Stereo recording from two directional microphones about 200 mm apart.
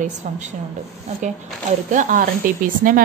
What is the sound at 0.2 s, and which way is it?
Speech, 40° right (ahead or behind).